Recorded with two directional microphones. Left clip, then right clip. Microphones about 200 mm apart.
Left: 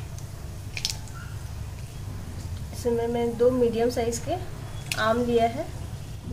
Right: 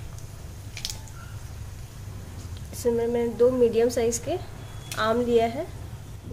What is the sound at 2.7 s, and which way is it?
A woman's voice, 30° right (ahead or behind).